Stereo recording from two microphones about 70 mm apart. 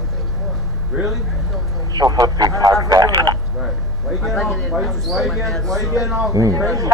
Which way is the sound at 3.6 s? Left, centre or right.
Centre.